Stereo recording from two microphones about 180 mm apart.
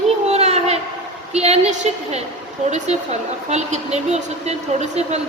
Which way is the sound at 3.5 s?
40° right (ahead or behind).